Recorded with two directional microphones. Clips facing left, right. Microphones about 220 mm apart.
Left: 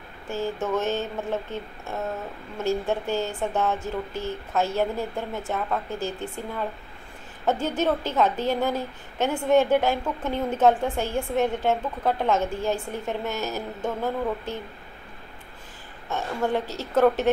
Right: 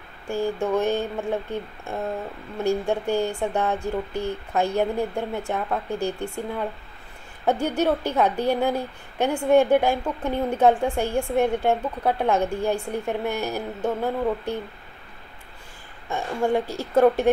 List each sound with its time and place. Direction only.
0.3 s a woman's voice: 15° right (ahead or behind)
7.6 s a woman's voice: 15° right (ahead or behind)
16.1 s a woman's voice: 10° right (ahead or behind)